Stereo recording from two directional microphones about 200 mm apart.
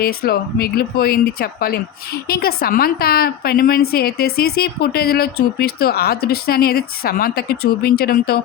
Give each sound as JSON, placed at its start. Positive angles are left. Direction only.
{"t": 0.0, "sound": "speech", "side_deg": 50}